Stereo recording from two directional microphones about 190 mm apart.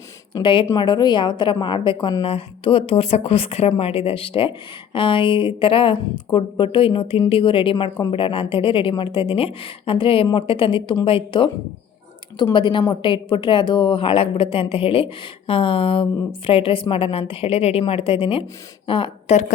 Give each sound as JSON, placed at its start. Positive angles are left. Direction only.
{"t": 0.3, "sound": "a woman's voice", "side_deg": 20}